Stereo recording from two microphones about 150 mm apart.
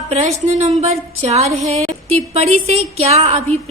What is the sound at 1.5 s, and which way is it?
A woman's voice, 45° right (ahead or behind).